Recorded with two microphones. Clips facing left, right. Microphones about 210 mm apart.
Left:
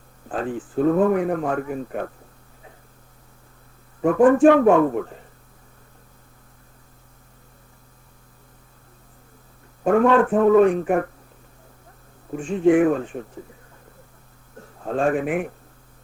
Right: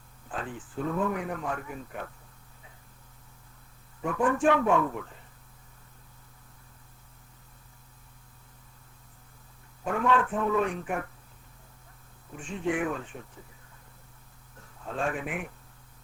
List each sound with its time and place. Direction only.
0.3 s speech: 50° left (ahead or behind)
4.0 s speech: 50° left (ahead or behind)
9.8 s speech: 55° left (ahead or behind)
12.3 s speech: 50° left (ahead or behind)
14.6 s a man's voice: 50° left (ahead or behind)